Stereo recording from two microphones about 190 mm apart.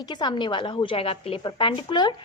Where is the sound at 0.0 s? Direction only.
20° left (ahead or behind).